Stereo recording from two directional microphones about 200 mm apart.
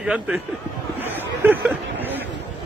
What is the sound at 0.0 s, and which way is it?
Speech, 5° right (ahead or behind).